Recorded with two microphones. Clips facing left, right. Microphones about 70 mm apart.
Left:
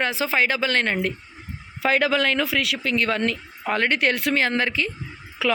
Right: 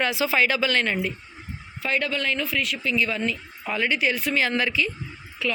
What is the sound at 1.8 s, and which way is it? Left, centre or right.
Speech, left.